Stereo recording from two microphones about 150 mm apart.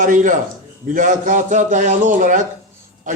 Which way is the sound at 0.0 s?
60° right (ahead or behind).